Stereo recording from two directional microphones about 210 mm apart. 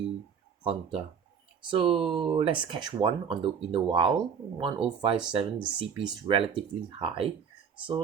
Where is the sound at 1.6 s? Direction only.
25° right (ahead or behind).